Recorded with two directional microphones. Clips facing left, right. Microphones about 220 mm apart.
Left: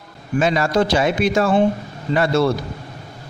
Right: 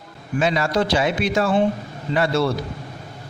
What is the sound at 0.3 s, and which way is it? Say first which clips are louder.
Speech: left 3 dB; 45° left (ahead or behind).